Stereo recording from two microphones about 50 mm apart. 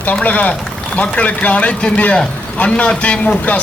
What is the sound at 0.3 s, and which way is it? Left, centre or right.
A man's voice, left.